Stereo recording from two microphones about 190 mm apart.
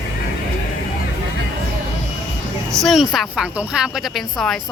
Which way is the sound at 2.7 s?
Centre (ahead or behind).